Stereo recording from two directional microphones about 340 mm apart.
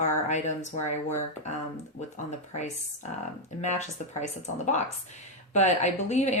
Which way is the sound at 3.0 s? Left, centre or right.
Centre.